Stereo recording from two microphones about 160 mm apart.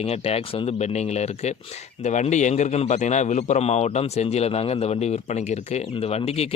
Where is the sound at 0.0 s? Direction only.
40° left (ahead or behind).